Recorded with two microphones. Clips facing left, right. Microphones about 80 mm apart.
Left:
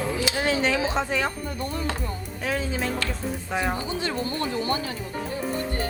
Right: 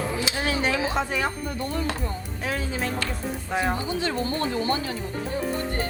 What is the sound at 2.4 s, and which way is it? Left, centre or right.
Speech, centre.